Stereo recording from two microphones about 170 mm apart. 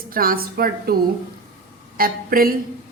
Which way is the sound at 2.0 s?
60° right (ahead or behind).